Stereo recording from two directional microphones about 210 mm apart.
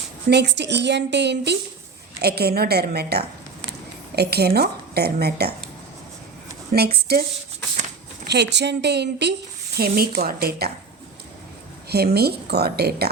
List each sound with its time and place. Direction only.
0.3 s a woman's voice: 55° right (ahead or behind)
6.7 s a woman's voice: 50° right (ahead or behind)
8.3 s a woman's voice: 55° right (ahead or behind)
12.1 s a woman's voice: 50° right (ahead or behind)